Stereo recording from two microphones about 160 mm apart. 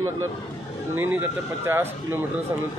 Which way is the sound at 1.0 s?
10° right (ahead or behind).